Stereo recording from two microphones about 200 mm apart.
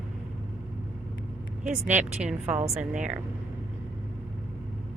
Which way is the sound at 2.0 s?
5° right (ahead or behind).